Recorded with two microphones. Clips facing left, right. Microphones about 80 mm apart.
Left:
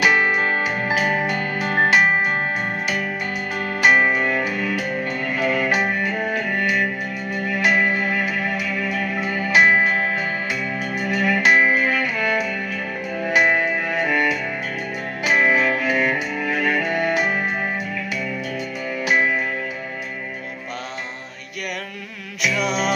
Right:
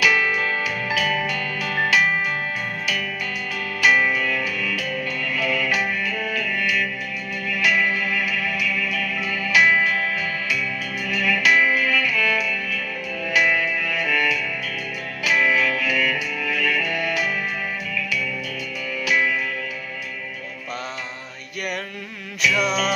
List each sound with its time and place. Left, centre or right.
0.0 s music: left
3.8 s music: left
19.0 s music: left
22.5 s music: centre